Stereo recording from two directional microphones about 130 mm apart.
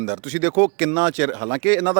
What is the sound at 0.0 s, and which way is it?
Speech, 20° right (ahead or behind).